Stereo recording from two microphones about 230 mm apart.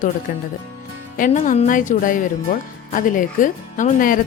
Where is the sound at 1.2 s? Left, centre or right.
Left.